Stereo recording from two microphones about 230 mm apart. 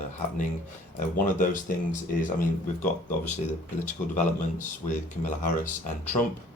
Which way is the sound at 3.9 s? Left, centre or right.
Left.